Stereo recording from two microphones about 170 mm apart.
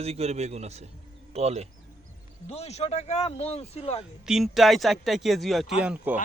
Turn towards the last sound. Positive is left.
turn(degrees=-10)  # may be behind; listen again after turning